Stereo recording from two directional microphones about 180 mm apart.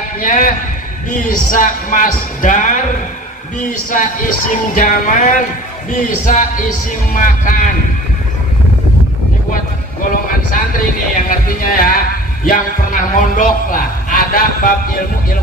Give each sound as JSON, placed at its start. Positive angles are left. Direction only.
{"t": 0.2, "sound": "a man's voice", "side_deg": 45}
{"t": 3.9, "sound": "speech", "side_deg": 50}
{"t": 11.2, "sound": "music", "side_deg": 50}
{"t": 12.4, "sound": "a man's voice", "side_deg": 45}